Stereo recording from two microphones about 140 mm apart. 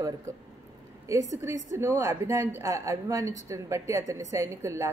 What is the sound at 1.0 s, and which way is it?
Speech, 20° right (ahead or behind).